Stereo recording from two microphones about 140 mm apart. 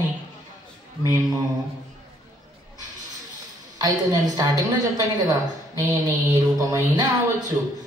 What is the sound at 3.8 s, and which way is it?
A man's voice, 25° right (ahead or behind).